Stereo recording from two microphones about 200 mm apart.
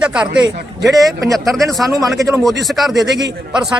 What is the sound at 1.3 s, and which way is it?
Speech, centre (ahead or behind).